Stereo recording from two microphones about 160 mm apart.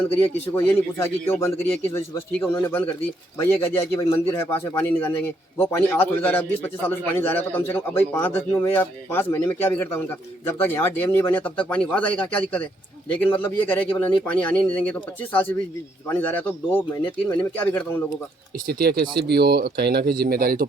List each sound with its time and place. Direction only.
0.0 s a man's voice: 15° left (ahead or behind)
18.7 s speech: 80° right